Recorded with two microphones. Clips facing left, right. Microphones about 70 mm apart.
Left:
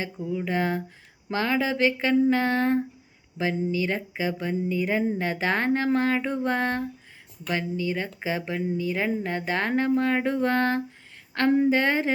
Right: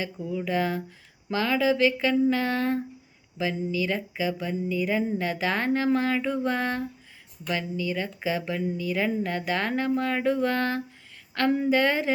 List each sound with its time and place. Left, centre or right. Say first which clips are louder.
0.0 s speech: left 1 dB; left